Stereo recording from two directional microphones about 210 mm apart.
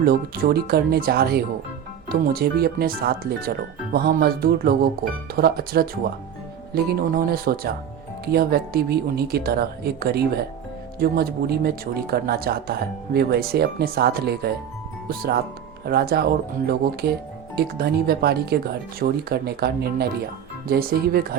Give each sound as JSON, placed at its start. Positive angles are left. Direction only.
{"t": 0.0, "sound": "speech", "side_deg": -45}
{"t": 15.8, "sound": "speech", "side_deg": -50}